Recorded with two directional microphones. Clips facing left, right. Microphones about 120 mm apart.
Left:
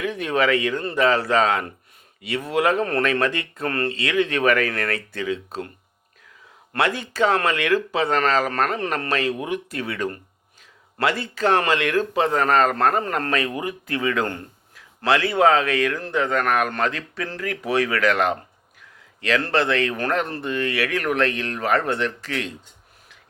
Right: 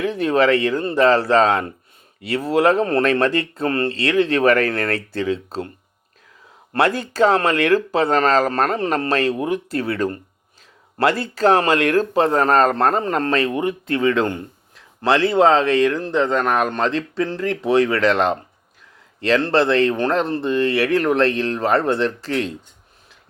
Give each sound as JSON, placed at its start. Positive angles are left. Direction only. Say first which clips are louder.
{"t": 0.0, "sound": "speech", "louder": "right 5 dB", "side_deg": -35}
{"t": 6.7, "sound": "speech", "louder": "right 5 dB", "side_deg": -40}